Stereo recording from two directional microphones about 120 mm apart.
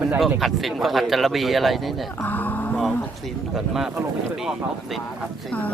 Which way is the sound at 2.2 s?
15° left (ahead or behind).